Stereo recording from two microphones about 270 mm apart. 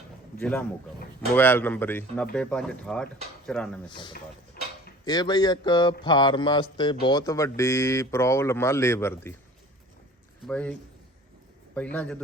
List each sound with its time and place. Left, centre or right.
0.3 s a man's voice: centre
3.8 s speech: centre
10.4 s speech: centre